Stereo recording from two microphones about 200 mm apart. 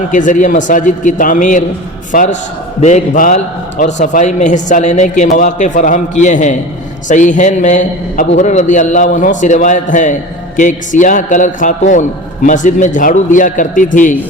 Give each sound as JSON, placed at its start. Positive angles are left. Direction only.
{"t": 0.1, "sound": "a man's voice", "side_deg": 40}